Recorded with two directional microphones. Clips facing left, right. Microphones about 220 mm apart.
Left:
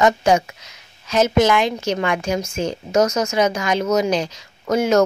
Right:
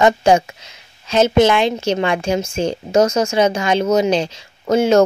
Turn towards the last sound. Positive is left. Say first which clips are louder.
# right 3 dB
turn(degrees=-25)  # may be behind; listen again after turning